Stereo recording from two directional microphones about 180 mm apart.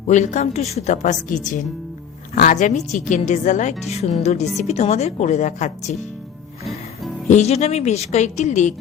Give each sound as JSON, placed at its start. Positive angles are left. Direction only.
{"t": 0.1, "sound": "a woman's voice", "side_deg": 40}
{"t": 7.3, "sound": "a woman's voice", "side_deg": 40}